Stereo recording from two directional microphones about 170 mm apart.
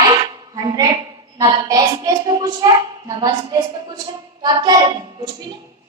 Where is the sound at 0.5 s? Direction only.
25° right (ahead or behind).